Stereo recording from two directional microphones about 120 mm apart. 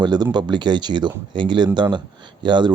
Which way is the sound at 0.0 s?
35° right (ahead or behind).